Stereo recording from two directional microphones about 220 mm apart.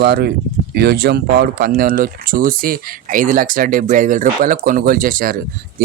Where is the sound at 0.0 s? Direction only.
45° right (ahead or behind).